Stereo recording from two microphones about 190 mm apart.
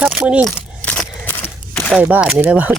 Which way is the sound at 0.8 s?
10° left (ahead or behind).